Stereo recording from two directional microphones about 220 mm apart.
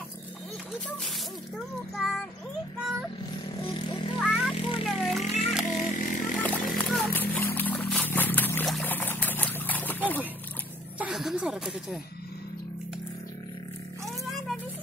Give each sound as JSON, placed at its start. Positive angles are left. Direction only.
{"t": 2.0, "sound": "child singing", "side_deg": 0}
{"t": 3.6, "sound": "vehicle", "side_deg": 25}
{"t": 4.2, "sound": "vehicle", "side_deg": 0}
{"t": 4.8, "sound": "speech", "side_deg": 0}
{"t": 5.2, "sound": "a sound", "side_deg": 30}
{"t": 5.5, "sound": "a sound", "side_deg": -5}
{"t": 5.9, "sound": "chainsaw", "side_deg": 35}
{"t": 6.4, "sound": "a sound", "side_deg": 5}
{"t": 11.0, "sound": "speech", "side_deg": -5}